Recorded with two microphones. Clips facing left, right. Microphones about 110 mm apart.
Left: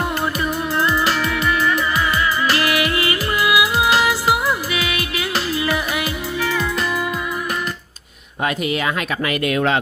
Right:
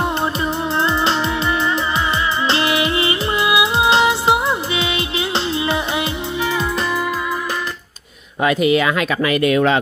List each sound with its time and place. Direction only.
0.7 s music: 25° right (ahead or behind)